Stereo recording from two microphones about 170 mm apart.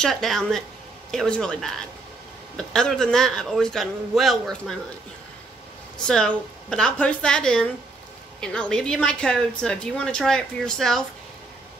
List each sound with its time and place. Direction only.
0.0 s a woman's voice: centre (ahead or behind)
6.0 s a woman's voice: 5° left (ahead or behind)